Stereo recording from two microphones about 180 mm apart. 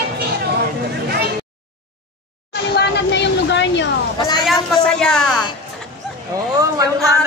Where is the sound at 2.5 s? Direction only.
65° left (ahead or behind).